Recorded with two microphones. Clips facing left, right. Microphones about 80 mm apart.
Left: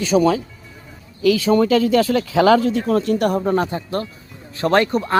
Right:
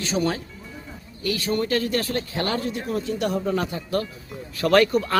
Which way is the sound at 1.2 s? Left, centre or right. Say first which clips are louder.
Left 10 dB; left.